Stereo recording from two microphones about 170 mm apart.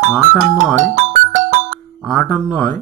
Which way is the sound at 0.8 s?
45° right (ahead or behind).